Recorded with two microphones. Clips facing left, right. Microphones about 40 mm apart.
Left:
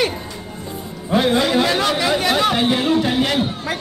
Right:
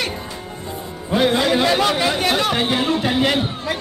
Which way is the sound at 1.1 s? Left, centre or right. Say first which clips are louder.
Left 1 dB; centre.